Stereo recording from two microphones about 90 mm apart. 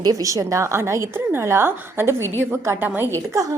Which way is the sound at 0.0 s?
40° right (ahead or behind).